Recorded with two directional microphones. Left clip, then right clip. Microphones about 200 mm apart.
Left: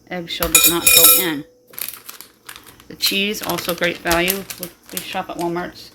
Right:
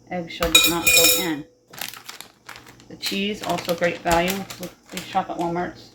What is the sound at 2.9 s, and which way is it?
Speech, 55° left (ahead or behind).